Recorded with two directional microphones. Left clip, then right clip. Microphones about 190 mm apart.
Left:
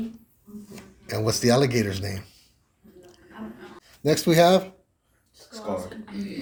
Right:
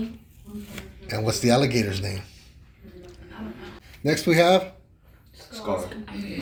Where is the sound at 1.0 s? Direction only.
45° left (ahead or behind).